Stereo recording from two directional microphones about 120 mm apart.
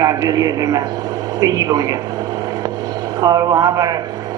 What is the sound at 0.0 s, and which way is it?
A woman's voice, 30° right (ahead or behind).